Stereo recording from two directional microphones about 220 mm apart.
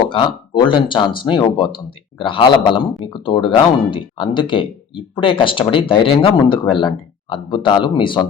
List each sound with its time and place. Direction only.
0.1 s speech: 20° left (ahead or behind)